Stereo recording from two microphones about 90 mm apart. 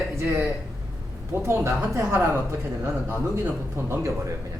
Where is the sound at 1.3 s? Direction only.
30° right (ahead or behind).